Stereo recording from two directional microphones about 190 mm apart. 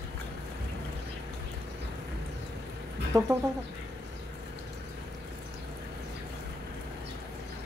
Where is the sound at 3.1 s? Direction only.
20° right (ahead or behind).